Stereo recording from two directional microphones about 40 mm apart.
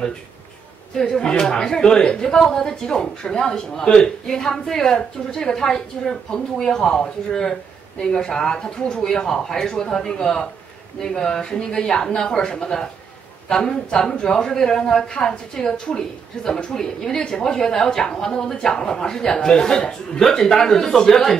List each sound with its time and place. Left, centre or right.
1.0 s speech: centre